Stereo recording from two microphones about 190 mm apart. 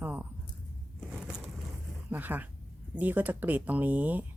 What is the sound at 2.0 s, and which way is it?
Speech, 10° right (ahead or behind).